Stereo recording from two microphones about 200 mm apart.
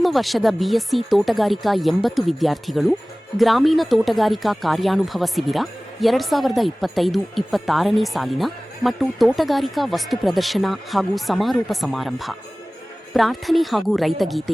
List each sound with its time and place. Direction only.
0.0 s speech: centre (ahead or behind)